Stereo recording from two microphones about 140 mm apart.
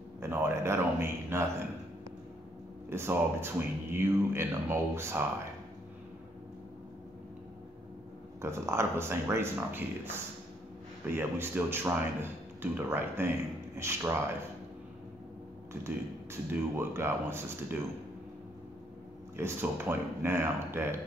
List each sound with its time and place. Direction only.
0.2 s speech: 20° right (ahead or behind)
2.9 s speech: 15° right (ahead or behind)
8.4 s speech: 20° right (ahead or behind)
11.1 s speech: 15° right (ahead or behind)
15.8 s speech: 15° right (ahead or behind)
19.3 s speech: 15° right (ahead or behind)